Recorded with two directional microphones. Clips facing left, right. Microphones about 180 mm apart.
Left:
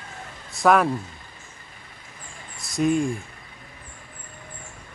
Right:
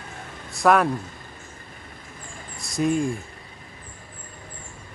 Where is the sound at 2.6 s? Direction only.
Centre (ahead or behind).